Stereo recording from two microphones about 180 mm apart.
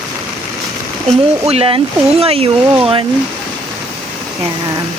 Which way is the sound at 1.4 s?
35° right (ahead or behind).